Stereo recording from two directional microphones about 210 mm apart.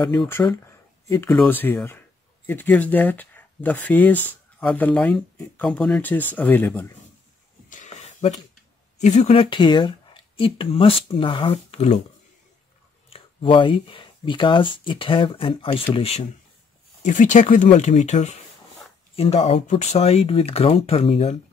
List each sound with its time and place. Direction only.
0.2 s speech: 10° left (ahead or behind)
7.7 s a sound: 35° left (ahead or behind)
9.0 s speech: 30° left (ahead or behind)
13.1 s speech: 25° left (ahead or behind)